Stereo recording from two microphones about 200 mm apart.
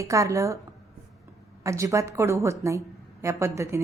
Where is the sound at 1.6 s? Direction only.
15° right (ahead or behind).